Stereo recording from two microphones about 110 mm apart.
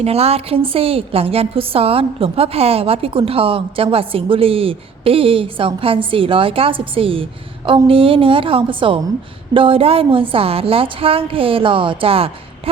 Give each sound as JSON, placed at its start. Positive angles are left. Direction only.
{"t": 0.0, "sound": "a woman's voice", "side_deg": -70}